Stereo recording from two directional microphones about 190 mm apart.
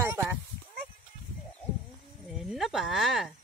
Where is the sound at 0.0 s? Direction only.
10° right (ahead or behind).